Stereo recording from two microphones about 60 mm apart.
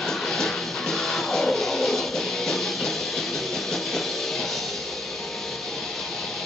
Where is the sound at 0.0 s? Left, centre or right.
Centre.